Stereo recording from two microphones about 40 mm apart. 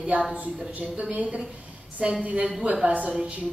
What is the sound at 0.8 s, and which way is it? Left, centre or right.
A woman's voice, right.